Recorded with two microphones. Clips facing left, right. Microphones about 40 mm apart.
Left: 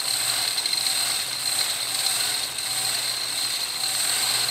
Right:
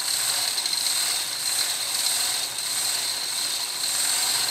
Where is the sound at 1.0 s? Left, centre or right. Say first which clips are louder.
Left 1 dB; centre.